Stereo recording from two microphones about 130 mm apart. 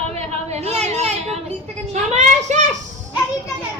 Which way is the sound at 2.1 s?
65° right (ahead or behind).